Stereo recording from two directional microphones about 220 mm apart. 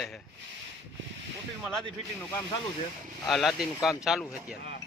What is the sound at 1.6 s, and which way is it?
Speech, centre (ahead or behind).